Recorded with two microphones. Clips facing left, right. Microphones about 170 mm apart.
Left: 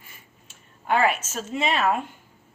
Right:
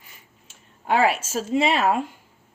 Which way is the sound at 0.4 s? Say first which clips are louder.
Right 1 dB; 30° right (ahead or behind).